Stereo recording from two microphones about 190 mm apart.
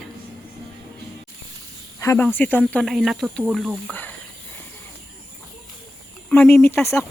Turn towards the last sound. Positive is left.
turn(degrees=10)  # may be behind; listen again after turning